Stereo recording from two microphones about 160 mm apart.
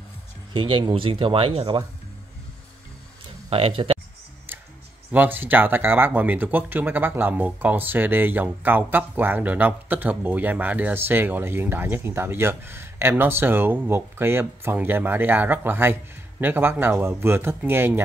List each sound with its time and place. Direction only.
0.5 s speech: 30° right (ahead or behind)
3.4 s speech: 35° right (ahead or behind)
4.5 s music: 10° right (ahead or behind)
5.1 s speech: 10° right (ahead or behind)